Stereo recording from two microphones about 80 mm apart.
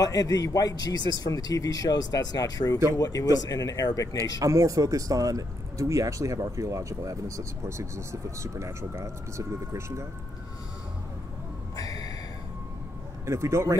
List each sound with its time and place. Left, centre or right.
0.0 s a man's voice: left
4.4 s speech: right
11.7 s a sound: left
13.2 s speech: right